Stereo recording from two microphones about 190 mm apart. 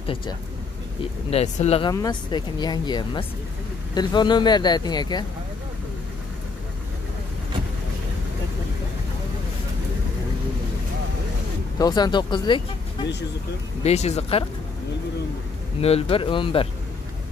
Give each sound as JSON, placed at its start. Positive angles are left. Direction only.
{"t": 0.0, "sound": "speech", "side_deg": 30}
{"t": 1.9, "sound": "speech", "side_deg": 20}
{"t": 11.8, "sound": "speech", "side_deg": 20}
{"t": 13.8, "sound": "speech", "side_deg": 35}
{"t": 15.8, "sound": "speech", "side_deg": 30}